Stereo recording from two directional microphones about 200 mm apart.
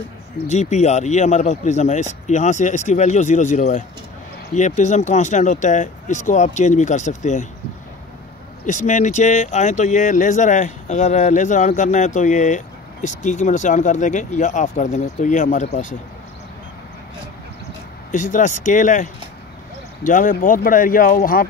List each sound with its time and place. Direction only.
0.5 s speech: 35° left (ahead or behind)
8.6 s speech: 40° left (ahead or behind)
18.1 s speech: 40° left (ahead or behind)